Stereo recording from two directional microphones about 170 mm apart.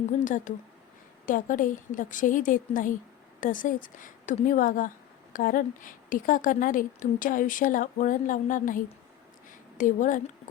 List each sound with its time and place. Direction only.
0.2 s speech: 50° left (ahead or behind)